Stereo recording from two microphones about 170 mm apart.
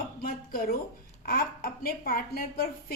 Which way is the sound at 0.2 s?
55° left (ahead or behind).